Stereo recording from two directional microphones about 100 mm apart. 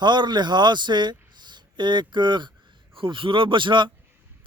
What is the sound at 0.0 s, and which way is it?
A man's voice, 50° right (ahead or behind).